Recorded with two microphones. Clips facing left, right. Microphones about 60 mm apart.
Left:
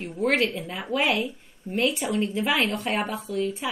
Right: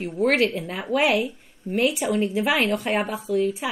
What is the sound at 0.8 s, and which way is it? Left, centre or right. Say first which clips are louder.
Speech: right 4 dB; centre.